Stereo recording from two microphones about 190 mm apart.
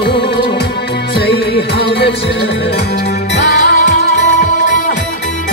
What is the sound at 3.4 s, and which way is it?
Music, 65° left (ahead or behind).